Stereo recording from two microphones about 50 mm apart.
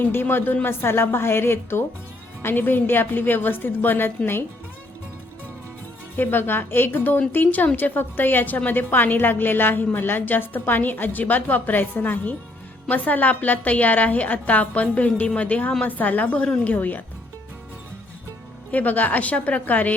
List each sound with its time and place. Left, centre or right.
0.1 s a woman's voice: left
6.1 s a woman's voice: left
18.7 s a woman's voice: left